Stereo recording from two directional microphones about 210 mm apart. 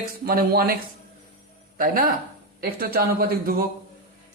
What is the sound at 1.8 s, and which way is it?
A man's voice, 45° right (ahead or behind).